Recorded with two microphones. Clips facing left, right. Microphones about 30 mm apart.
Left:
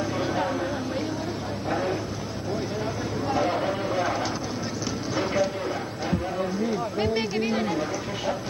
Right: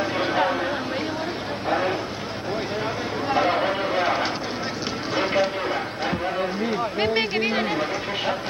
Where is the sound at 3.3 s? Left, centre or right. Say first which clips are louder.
Right 4 dB; right.